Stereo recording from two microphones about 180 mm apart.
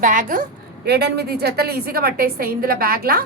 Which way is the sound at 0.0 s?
45° right (ahead or behind).